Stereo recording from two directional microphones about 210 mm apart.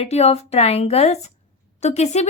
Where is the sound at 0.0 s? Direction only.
30° left (ahead or behind).